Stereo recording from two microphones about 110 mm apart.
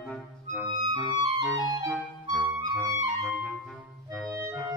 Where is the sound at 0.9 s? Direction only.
40° right (ahead or behind).